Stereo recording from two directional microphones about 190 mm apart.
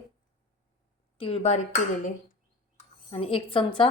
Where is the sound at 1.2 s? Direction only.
35° left (ahead or behind).